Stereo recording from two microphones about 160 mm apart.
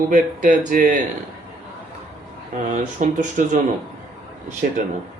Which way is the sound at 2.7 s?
50° right (ahead or behind).